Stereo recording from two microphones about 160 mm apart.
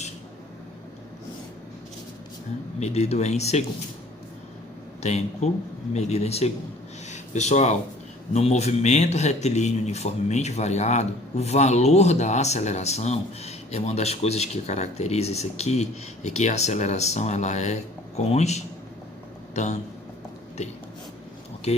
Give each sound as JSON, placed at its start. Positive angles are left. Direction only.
{"t": 2.8, "sound": "speech", "side_deg": 45}
{"t": 5.0, "sound": "speech", "side_deg": 45}